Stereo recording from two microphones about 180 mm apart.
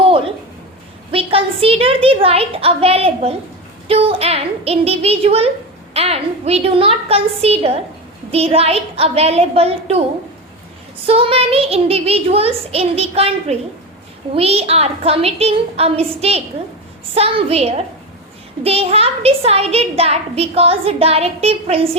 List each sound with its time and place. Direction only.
0.0 s a sound: 30° right (ahead or behind)
1.1 s a woman's voice: 30° right (ahead or behind)
11.0 s a child's voice: 30° right (ahead or behind)